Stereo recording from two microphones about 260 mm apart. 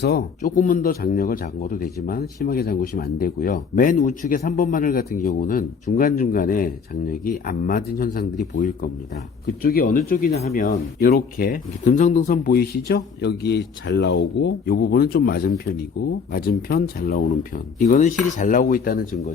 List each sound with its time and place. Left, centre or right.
0.0 s speech: left